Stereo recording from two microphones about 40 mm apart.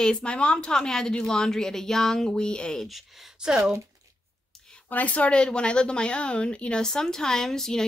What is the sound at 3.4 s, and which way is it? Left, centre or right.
Speech, centre.